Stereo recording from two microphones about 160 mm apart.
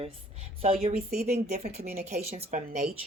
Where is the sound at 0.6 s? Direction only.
40° right (ahead or behind).